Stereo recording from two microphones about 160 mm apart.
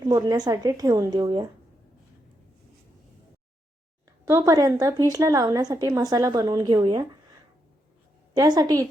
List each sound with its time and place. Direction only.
0.0 s a woman's voice: 20° right (ahead or behind)
4.3 s a woman's voice: 20° right (ahead or behind)
8.3 s a woman's voice: 25° right (ahead or behind)